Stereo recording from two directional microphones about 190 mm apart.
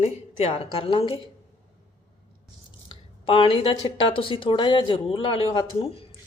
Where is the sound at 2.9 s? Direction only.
25° left (ahead or behind).